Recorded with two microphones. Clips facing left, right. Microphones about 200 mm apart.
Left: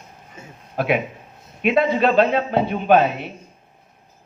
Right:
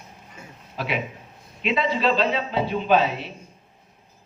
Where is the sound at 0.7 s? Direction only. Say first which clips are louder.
Left 7 dB; 55° left (ahead or behind).